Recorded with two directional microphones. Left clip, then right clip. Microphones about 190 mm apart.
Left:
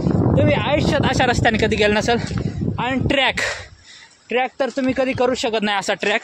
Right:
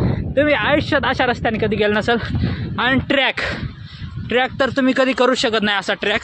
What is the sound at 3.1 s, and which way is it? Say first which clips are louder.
Speech: even; 5° right (ahead or behind).